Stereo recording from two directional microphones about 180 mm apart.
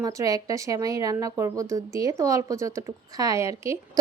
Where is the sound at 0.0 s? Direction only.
20° right (ahead or behind).